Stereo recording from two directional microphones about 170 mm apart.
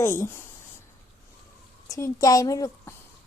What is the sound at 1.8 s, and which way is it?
A woman's voice, 20° left (ahead or behind).